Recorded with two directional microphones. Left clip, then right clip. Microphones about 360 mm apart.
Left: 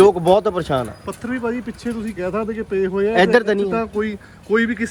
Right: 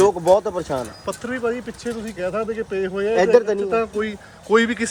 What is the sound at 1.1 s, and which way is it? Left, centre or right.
Speech, centre.